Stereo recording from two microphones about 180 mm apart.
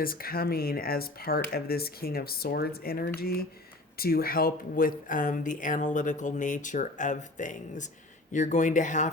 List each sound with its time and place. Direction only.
0.0 s speech: 55° left (ahead or behind)